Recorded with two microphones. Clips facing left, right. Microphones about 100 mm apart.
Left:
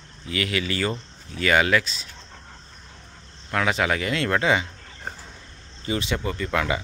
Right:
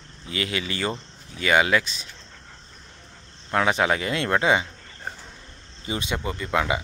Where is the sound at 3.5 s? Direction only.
25° right (ahead or behind).